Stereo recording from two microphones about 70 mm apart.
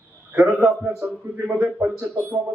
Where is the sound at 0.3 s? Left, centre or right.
Right.